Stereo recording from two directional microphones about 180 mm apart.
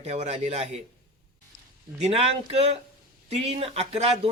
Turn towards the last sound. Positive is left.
turn(degrees=-35)  # may be behind; listen again after turning